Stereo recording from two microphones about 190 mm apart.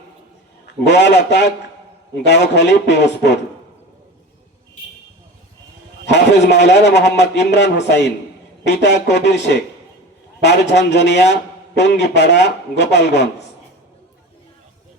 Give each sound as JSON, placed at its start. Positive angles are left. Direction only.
{"t": 0.9, "sound": "a man's voice", "side_deg": 65}
{"t": 6.1, "sound": "a man's voice", "side_deg": 65}
{"t": 10.4, "sound": "a man's voice", "side_deg": 65}